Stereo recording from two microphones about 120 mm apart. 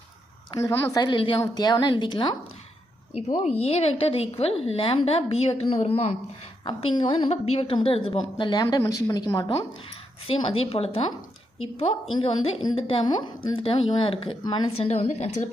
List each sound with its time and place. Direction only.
0.6 s speech: 20° left (ahead or behind)
0.9 s speech: 40° left (ahead or behind)
1.4 s speech: 35° left (ahead or behind)
3.4 s a woman's voice: 60° left (ahead or behind)
6.7 s a woman's voice: 45° left (ahead or behind)
8.8 s speech: 25° left (ahead or behind)
10.2 s a woman's voice: 50° left (ahead or behind)
14.8 s a woman's voice: 60° left (ahead or behind)